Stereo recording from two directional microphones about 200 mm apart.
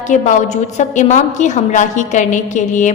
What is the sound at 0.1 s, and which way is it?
A woman's voice, 35° left (ahead or behind).